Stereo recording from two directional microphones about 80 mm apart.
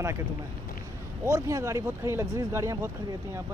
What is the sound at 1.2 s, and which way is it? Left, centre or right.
Speech, right.